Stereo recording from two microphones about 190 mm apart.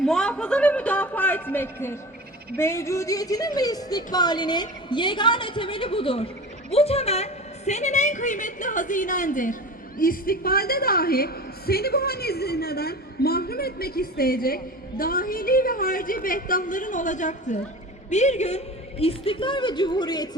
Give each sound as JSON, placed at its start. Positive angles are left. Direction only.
{"t": 0.0, "sound": "a man's voice", "side_deg": 5}